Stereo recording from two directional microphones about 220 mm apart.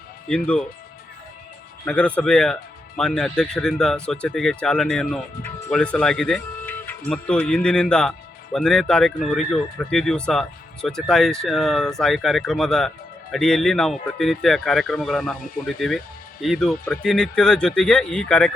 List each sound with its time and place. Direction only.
0.3 s speech: 5° left (ahead or behind)
1.8 s speech: 5° left (ahead or behind)